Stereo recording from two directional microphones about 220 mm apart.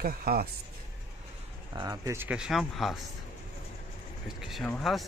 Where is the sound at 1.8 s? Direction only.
15° right (ahead or behind).